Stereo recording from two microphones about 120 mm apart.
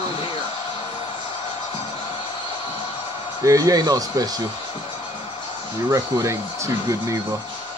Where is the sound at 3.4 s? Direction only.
30° right (ahead or behind).